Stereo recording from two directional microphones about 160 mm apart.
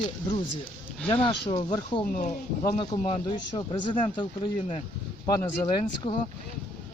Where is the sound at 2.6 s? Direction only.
30° left (ahead or behind).